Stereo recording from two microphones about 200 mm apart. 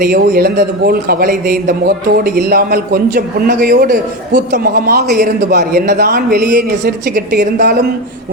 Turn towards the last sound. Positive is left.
turn(degrees=-55)  # may be behind; listen again after turning